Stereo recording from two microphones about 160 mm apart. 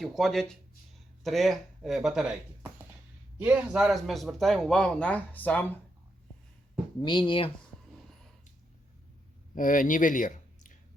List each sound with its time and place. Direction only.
0.0 s a man's voice: centre (ahead or behind)
7.0 s speech: 30° left (ahead or behind)
9.6 s speech: 55° left (ahead or behind)